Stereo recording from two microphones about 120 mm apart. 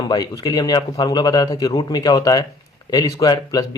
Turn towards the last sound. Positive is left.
turn(degrees=30)  # may be behind; listen again after turning